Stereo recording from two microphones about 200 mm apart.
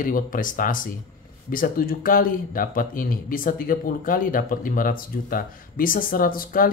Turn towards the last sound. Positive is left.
turn(degrees=45)  # may be behind; listen again after turning